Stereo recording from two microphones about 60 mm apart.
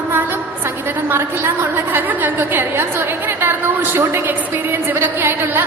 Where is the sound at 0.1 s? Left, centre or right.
Right.